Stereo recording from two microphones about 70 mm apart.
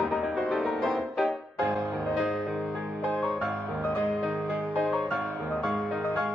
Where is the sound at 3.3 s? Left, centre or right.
Centre.